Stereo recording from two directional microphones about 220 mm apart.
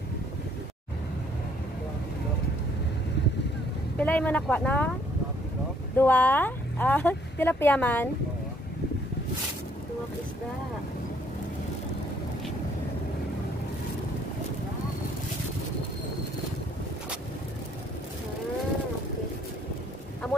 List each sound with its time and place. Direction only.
4.0 s speech: 5° left (ahead or behind)
5.9 s speech: 10° left (ahead or behind)
20.2 s a sound: centre (ahead or behind)